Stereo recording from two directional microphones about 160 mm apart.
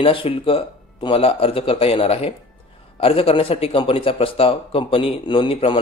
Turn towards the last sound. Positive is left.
turn(degrees=35)  # may be behind; listen again after turning